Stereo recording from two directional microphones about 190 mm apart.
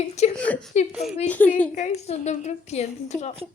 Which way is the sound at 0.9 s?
Centre (ahead or behind).